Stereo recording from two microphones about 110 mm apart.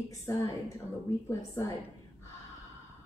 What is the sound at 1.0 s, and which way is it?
Speech, 25° left (ahead or behind).